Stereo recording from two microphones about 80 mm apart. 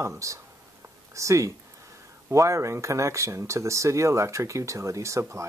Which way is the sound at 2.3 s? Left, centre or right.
Right.